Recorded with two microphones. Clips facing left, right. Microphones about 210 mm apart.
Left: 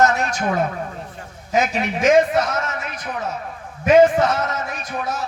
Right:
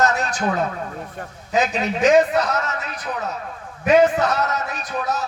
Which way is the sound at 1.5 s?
35° right (ahead or behind).